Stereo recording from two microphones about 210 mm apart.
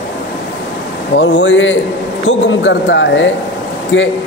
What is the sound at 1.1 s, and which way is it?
A man's voice, 60° left (ahead or behind).